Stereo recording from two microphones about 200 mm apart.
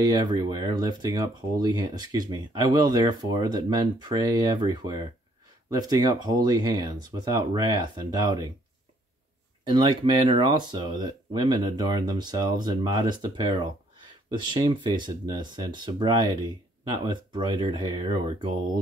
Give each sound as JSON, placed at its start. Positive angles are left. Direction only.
{"t": 0.0, "sound": "speech", "side_deg": -20}
{"t": 9.7, "sound": "speech", "side_deg": -25}